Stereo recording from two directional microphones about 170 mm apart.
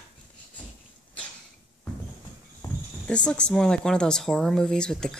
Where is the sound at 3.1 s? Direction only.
5° left (ahead or behind).